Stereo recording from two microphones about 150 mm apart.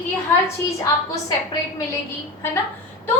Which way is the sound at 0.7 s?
20° left (ahead or behind).